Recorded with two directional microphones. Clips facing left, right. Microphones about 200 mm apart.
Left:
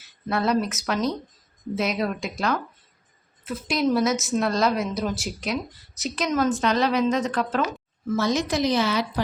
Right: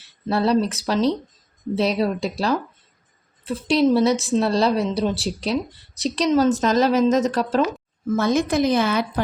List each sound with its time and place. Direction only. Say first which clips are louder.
0.0 s a woman's voice: right 4 dB; 35° right (ahead or behind)
8.1 s a woman's voice: right 4 dB; 55° right (ahead or behind)